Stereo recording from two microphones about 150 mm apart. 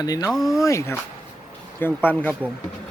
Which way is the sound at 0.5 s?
20° left (ahead or behind).